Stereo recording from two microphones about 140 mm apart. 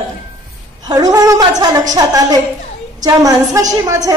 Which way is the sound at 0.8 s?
25° right (ahead or behind).